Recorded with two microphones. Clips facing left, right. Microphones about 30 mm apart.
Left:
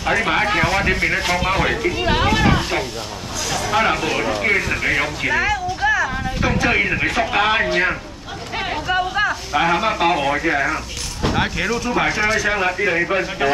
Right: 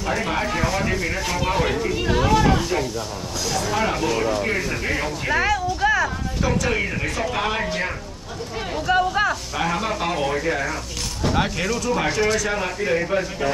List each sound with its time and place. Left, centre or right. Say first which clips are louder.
0.0 s speech: left 5 dB; left
1.4 s speech: left 3 dB; left
2.0 s a sound: left 1 dB; left
3.4 s speech: left 4 dB; left
5.4 s music: left 1 dB; centre
6.4 s speech: left 4 dB; left
8.8 s a sound: right 1 dB; centre
9.5 s speech: left 6 dB; left
11.3 s speech: left 2 dB; centre; by 13.5 s left